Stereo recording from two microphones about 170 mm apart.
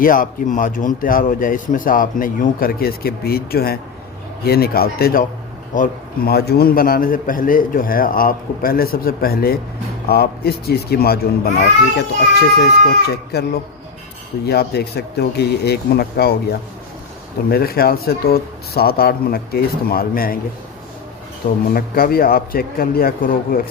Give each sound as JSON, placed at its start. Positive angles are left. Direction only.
{"t": 0.0, "sound": "a man's voice", "side_deg": 55}
{"t": 17.5, "sound": "a man's voice", "side_deg": 65}
{"t": 21.7, "sound": "a man's voice", "side_deg": 60}